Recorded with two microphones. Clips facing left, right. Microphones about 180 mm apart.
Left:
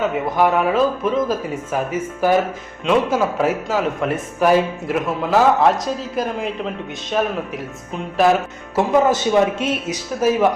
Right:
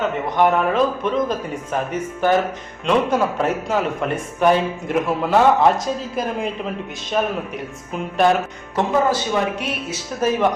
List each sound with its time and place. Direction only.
0.3 s a man's voice: 5° left (ahead or behind)
8.2 s a man's voice: centre (ahead or behind)
8.9 s speech: 20° left (ahead or behind)
10.2 s speech: 10° left (ahead or behind)